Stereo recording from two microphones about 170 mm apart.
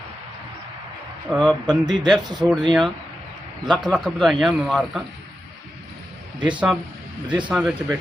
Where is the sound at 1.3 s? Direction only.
5° left (ahead or behind).